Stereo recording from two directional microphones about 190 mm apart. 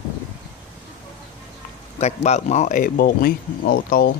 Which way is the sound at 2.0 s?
35° left (ahead or behind).